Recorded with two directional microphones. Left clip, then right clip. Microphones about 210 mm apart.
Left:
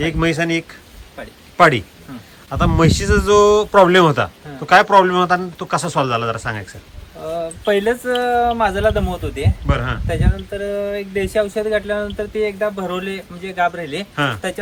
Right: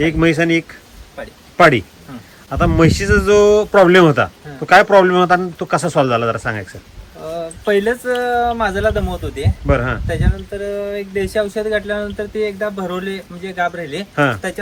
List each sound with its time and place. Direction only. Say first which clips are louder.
0.0 s speech: right 4 dB; 10° left (ahead or behind)